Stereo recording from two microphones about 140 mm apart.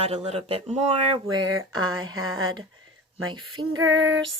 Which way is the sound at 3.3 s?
30° right (ahead or behind).